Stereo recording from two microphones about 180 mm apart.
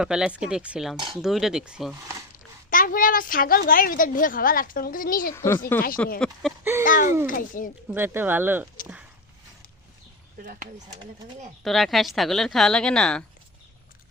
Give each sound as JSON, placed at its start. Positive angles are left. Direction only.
{"t": 0.0, "sound": "speech", "side_deg": -5}
{"t": 2.6, "sound": "a woman's voice", "side_deg": 50}
{"t": 5.3, "sound": "speech", "side_deg": 15}
{"t": 6.8, "sound": "a woman's voice", "side_deg": 50}
{"t": 7.9, "sound": "speech", "side_deg": -10}
{"t": 11.6, "sound": "speech", "side_deg": 0}